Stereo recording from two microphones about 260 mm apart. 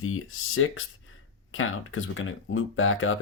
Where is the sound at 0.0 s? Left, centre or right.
Left.